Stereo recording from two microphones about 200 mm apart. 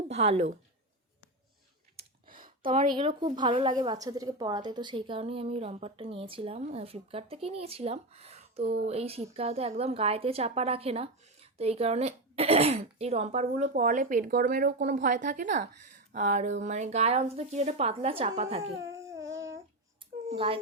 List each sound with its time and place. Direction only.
0.1 s speech: 30° right (ahead or behind)
2.0 s a sound: 45° right (ahead or behind)
2.7 s a woman's voice: 30° right (ahead or behind)
8.6 s speech: 55° right (ahead or behind)
8.9 s a woman's voice: 30° right (ahead or behind)
18.9 s babbling: 15° right (ahead or behind)
19.1 s a sound: 70° right (ahead or behind)
20.3 s a woman's voice: 25° right (ahead or behind)